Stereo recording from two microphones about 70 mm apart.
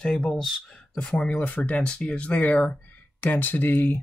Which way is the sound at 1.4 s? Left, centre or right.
Left.